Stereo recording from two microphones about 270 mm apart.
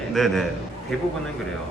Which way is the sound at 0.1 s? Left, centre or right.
Centre.